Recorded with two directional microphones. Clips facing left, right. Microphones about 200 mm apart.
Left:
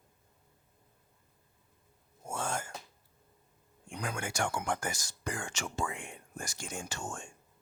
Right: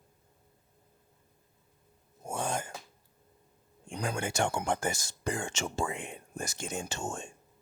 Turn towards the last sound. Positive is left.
turn(degrees=-25)  # may be behind; listen again after turning